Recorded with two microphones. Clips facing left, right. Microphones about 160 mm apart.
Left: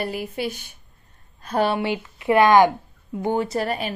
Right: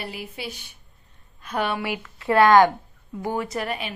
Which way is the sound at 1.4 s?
35° left (ahead or behind).